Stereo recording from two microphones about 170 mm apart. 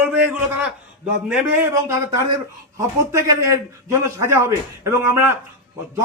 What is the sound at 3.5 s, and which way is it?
A man's voice, 15° right (ahead or behind).